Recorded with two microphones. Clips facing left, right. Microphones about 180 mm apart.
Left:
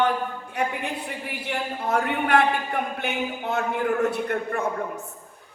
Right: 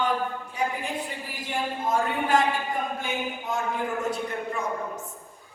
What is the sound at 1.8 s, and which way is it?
A woman's voice, 65° left (ahead or behind).